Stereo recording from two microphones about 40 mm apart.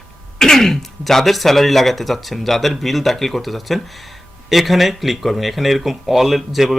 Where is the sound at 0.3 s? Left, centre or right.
Centre.